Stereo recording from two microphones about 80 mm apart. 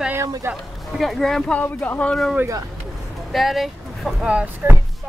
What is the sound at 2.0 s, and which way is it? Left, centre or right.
Speech, centre.